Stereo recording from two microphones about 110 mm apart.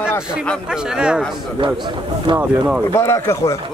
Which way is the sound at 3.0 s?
25° left (ahead or behind).